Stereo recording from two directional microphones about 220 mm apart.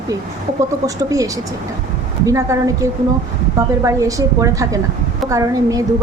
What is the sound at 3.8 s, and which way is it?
A woman's voice, 15° right (ahead or behind).